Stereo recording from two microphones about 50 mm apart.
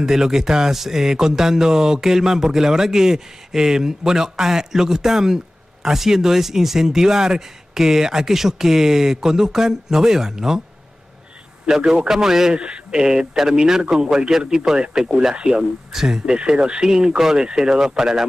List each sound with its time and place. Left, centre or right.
0.0 s speech: centre
11.6 s speech: centre